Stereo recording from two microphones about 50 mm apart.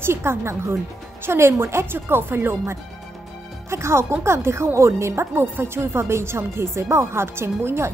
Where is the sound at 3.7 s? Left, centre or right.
Right.